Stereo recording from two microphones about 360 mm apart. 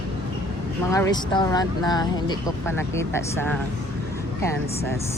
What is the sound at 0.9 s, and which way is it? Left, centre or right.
Speech, centre.